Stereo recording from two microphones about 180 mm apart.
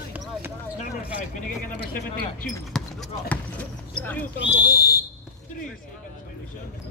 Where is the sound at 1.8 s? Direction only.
50° left (ahead or behind).